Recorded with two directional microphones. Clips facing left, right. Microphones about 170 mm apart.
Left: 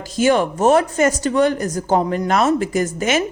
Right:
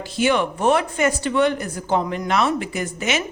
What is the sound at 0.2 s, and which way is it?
Speech, 40° left (ahead or behind).